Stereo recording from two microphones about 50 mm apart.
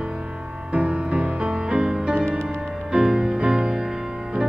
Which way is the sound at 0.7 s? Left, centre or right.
Right.